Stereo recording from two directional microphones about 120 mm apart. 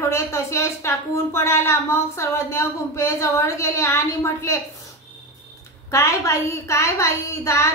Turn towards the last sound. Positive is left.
turn(degrees=25)  # may be behind; listen again after turning